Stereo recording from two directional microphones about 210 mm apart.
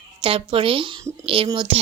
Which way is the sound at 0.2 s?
25° right (ahead or behind).